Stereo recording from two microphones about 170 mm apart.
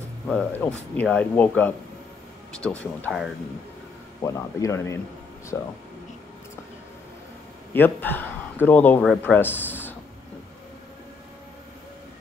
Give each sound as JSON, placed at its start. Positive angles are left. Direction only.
{"t": 0.3, "sound": "speech", "side_deg": 5}
{"t": 4.2, "sound": "speech", "side_deg": 20}
{"t": 7.7, "sound": "a man's voice", "side_deg": 10}